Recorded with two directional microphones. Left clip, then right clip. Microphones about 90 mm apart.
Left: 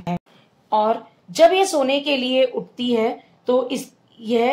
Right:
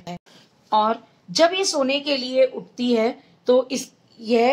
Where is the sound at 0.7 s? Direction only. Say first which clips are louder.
Left 1 dB; 60° left (ahead or behind).